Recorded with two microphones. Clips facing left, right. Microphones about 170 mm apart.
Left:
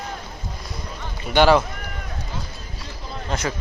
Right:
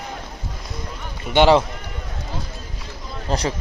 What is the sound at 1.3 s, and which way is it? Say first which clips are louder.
Speech: right 1 dB; 20° right (ahead or behind).